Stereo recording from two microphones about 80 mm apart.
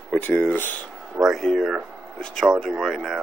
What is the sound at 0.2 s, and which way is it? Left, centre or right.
Speech, left.